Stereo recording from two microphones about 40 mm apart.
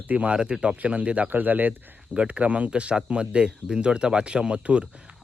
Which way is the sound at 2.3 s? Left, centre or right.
Right.